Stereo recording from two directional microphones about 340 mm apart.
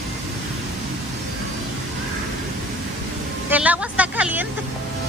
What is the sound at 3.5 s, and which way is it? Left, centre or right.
Vehicle, centre.